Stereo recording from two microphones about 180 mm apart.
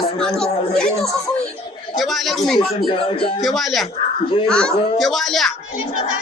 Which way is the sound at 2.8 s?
30° left (ahead or behind).